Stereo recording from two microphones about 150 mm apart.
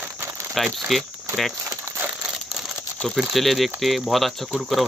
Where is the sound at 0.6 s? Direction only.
Centre (ahead or behind).